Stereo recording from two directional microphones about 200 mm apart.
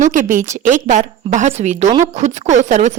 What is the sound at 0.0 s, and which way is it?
Speech, 40° right (ahead or behind).